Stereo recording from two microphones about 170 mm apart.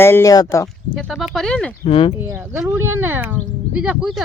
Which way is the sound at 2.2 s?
15° right (ahead or behind).